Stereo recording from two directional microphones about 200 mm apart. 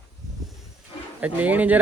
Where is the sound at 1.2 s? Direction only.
10° right (ahead or behind).